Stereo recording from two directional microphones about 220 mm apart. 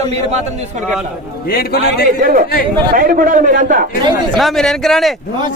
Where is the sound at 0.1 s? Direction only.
30° right (ahead or behind).